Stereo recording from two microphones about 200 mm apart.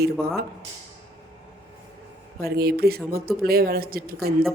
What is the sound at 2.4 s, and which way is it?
Speech, 50° right (ahead or behind).